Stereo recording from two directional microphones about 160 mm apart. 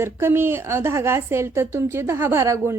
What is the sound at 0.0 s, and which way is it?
A woman's voice, 15° right (ahead or behind).